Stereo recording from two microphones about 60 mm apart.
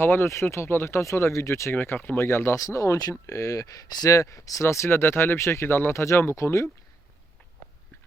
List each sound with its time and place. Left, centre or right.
0.0 s speech: left
1.7 s speech: left
2.6 s speech: left
4.9 s speech: left